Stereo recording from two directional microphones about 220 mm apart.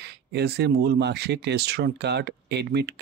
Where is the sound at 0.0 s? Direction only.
50° right (ahead or behind).